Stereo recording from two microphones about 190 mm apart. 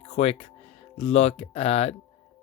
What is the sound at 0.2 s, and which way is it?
Speech, 35° left (ahead or behind).